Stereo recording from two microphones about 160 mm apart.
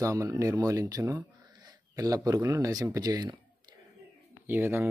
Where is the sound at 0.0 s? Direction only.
20° right (ahead or behind).